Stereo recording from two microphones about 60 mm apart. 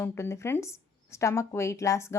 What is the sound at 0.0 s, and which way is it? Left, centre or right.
Speech, left.